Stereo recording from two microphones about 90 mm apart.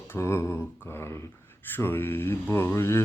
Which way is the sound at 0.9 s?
30° left (ahead or behind).